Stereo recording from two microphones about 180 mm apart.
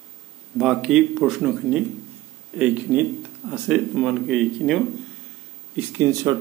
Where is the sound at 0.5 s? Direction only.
Centre (ahead or behind).